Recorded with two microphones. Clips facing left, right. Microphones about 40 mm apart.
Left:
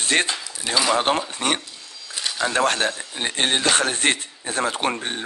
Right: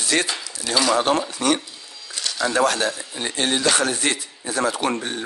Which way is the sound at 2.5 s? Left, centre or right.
Left.